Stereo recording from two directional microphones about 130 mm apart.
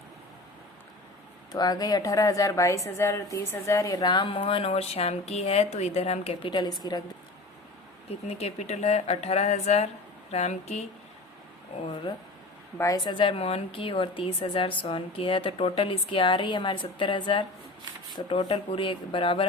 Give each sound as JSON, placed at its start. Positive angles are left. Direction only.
{"t": 1.5, "sound": "a woman's voice", "side_deg": 30}
{"t": 6.5, "sound": "a woman's voice", "side_deg": 30}
{"t": 8.3, "sound": "speech", "side_deg": 55}
{"t": 12.1, "sound": "a woman's voice", "side_deg": 35}
{"t": 12.7, "sound": "speech", "side_deg": 25}
{"t": 13.1, "sound": "a woman's voice", "side_deg": 40}